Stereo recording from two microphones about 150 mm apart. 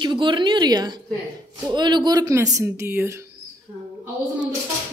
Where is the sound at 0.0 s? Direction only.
30° right (ahead or behind); by 3.3 s 15° right (ahead or behind).